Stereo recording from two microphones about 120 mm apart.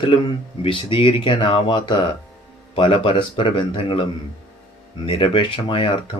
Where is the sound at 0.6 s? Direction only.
50° left (ahead or behind).